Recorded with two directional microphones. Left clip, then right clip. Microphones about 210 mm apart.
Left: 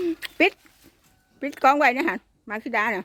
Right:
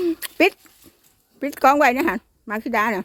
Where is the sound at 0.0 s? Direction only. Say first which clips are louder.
Right 3 dB; 15° right (ahead or behind).